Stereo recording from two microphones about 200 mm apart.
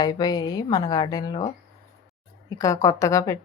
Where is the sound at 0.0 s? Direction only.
20° left (ahead or behind).